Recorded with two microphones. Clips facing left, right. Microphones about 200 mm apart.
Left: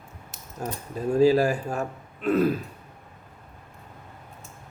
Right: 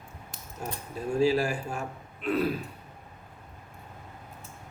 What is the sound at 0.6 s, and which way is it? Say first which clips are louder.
A man's voice: left 5 dB; 40° left (ahead or behind).